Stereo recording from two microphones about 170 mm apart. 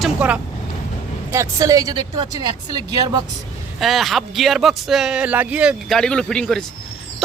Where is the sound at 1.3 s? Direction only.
20° right (ahead or behind).